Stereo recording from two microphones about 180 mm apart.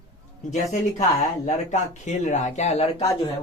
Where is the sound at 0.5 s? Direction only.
40° left (ahead or behind).